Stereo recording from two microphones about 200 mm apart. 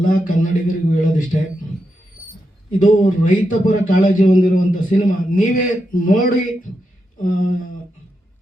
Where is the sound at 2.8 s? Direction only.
40° left (ahead or behind).